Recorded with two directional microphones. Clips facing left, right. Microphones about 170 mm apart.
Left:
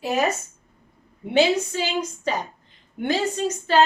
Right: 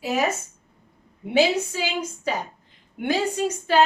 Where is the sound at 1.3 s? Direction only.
10° right (ahead or behind).